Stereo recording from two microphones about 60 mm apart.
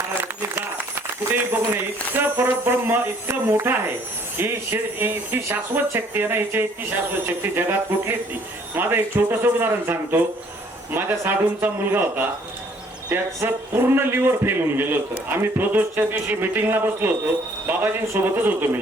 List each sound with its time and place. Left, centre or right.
1.3 s a man's voice: right
13.4 s a man's voice: right